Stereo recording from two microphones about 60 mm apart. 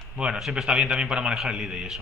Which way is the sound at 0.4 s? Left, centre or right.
Centre.